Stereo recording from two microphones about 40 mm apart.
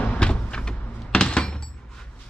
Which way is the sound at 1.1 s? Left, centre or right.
Left.